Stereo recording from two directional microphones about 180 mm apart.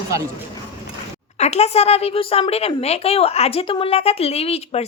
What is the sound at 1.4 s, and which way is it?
Speech, 35° left (ahead or behind).